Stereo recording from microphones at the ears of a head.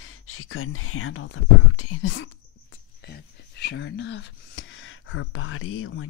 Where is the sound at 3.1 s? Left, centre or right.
Left.